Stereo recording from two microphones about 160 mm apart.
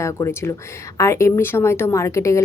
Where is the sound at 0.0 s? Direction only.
20° left (ahead or behind).